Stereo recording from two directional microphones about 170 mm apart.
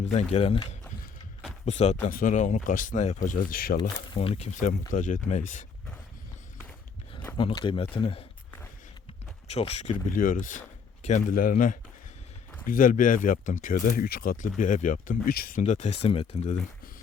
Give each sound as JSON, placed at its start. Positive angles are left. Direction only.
{"t": 0.0, "sound": "speech", "side_deg": 40}
{"t": 1.6, "sound": "speech", "side_deg": 40}
{"t": 3.8, "sound": "speech", "side_deg": 30}
{"t": 4.9, "sound": "speech", "side_deg": 50}
{"t": 7.3, "sound": "speech", "side_deg": 30}
{"t": 9.5, "sound": "speech", "side_deg": 40}